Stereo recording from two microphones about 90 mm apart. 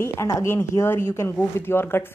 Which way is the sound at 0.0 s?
30° left (ahead or behind).